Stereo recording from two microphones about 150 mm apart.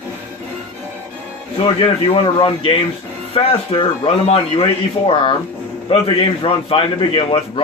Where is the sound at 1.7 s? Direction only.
35° left (ahead or behind).